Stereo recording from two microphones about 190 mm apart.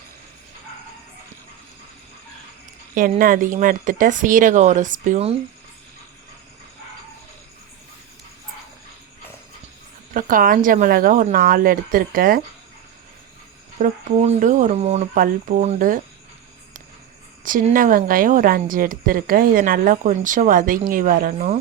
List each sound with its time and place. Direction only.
2.9 s speech: 45° right (ahead or behind)
10.2 s speech: 45° right (ahead or behind)
13.7 s speech: 40° right (ahead or behind)
17.4 s speech: 45° right (ahead or behind)